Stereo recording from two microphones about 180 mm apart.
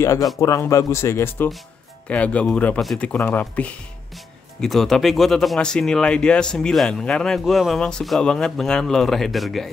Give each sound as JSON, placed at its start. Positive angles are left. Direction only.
{"t": 0.0, "sound": "speech", "side_deg": 15}